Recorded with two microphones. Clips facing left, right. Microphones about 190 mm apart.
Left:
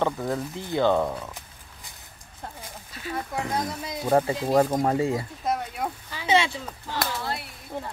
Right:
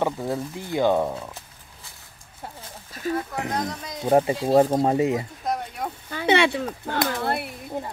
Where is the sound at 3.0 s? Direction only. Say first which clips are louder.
Right 9 dB; 45° right (ahead or behind).